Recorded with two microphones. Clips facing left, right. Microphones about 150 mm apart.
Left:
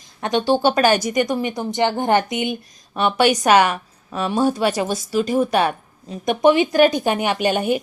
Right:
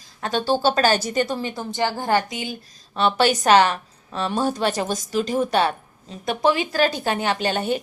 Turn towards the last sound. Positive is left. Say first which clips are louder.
# left 3 dB
turn(degrees=10)  # may be behind; listen again after turning